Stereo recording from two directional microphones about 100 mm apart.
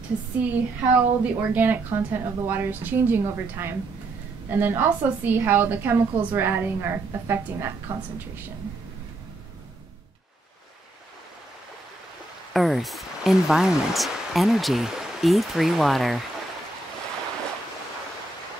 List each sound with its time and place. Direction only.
0.4 s a woman's voice: 15° right (ahead or behind)
12.5 s speech: centre (ahead or behind)